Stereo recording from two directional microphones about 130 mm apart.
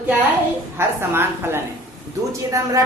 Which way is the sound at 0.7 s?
20° right (ahead or behind).